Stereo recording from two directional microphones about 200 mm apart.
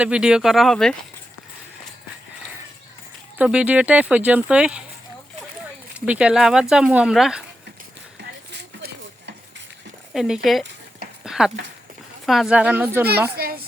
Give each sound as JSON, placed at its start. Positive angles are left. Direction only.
{"t": 0.0, "sound": "speech", "side_deg": -5}
{"t": 3.3, "sound": "speech", "side_deg": -5}
{"t": 6.1, "sound": "speech", "side_deg": -5}
{"t": 8.5, "sound": "stir", "side_deg": -55}
{"t": 10.1, "sound": "speech", "side_deg": 0}
{"t": 11.2, "sound": "a sound", "side_deg": 0}
{"t": 12.2, "sound": "speech", "side_deg": 0}
{"t": 13.3, "sound": "a child's voice", "side_deg": -50}